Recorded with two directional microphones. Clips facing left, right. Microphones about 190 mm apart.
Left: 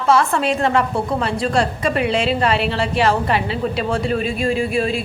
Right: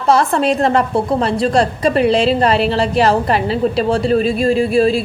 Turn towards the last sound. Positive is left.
turn(degrees=-35)  # may be behind; listen again after turning